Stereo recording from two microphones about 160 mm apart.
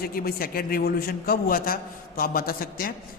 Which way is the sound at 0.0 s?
65° left (ahead or behind).